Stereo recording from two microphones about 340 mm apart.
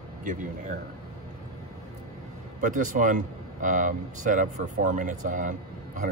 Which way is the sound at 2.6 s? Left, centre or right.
Right.